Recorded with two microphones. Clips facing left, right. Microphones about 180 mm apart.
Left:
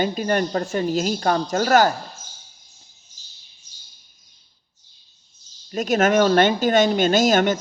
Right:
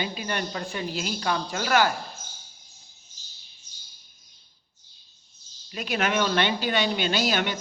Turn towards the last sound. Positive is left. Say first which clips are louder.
# left 9 dB
turn(degrees=45)  # may be behind; listen again after turning